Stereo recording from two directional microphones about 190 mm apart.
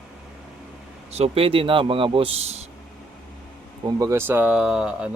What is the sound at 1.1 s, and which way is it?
Speech, 30° right (ahead or behind).